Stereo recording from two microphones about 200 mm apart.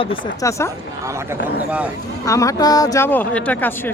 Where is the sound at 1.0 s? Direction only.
15° right (ahead or behind).